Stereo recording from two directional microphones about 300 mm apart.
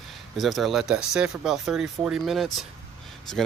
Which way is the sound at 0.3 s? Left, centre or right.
Centre.